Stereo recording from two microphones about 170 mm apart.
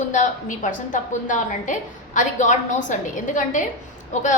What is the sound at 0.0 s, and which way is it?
A woman's voice, 50° left (ahead or behind).